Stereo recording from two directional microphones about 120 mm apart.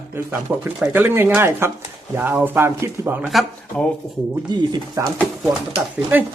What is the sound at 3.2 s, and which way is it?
Speech, centre (ahead or behind).